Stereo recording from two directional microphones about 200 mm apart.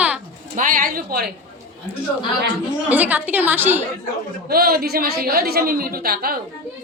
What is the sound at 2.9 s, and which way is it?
Speech, 10° right (ahead or behind).